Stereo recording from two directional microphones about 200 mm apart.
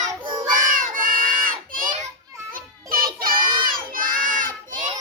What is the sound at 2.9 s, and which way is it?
Child singing, 45° right (ahead or behind).